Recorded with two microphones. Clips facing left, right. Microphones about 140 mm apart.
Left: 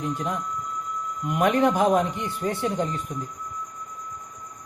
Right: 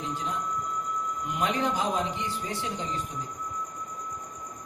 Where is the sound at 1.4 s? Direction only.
55° left (ahead or behind).